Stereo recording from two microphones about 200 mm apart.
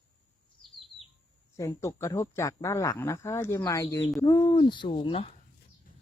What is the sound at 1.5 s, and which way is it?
Speech, 15° left (ahead or behind).